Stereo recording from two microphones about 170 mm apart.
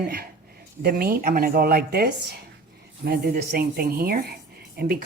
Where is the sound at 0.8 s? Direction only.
65° right (ahead or behind).